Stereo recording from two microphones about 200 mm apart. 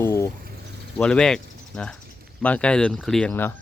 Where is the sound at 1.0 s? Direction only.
5° left (ahead or behind).